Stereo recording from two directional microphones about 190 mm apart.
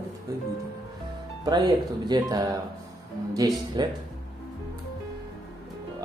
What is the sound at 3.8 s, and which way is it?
Speech, 20° right (ahead or behind).